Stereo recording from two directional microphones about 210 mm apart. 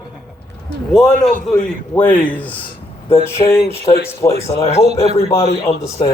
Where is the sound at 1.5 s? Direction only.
5° left (ahead or behind).